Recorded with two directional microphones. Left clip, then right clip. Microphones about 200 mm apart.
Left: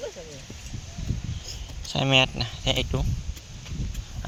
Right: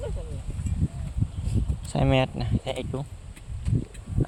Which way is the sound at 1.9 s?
25° right (ahead or behind).